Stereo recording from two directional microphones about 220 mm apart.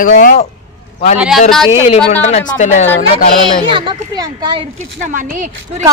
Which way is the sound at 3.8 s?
20° right (ahead or behind).